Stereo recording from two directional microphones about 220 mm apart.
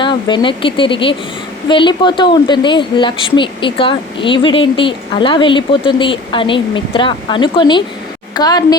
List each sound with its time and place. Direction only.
0.0 s a woman's voice: 20° left (ahead or behind)